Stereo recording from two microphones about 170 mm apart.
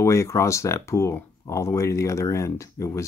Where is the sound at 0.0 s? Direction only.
15° left (ahead or behind).